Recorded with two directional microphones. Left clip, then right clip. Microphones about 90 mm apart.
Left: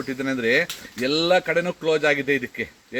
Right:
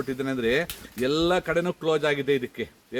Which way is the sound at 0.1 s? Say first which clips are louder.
Left 5 dB; 25° right (ahead or behind).